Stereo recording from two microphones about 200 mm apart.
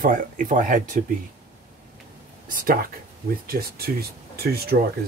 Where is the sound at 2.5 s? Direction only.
45° right (ahead or behind).